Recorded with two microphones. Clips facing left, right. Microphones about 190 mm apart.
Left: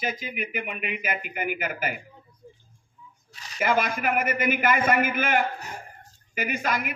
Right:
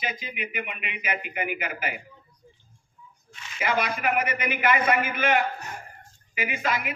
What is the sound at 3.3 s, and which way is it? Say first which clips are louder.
A man's voice: left 3 dB; 35° left (ahead or behind).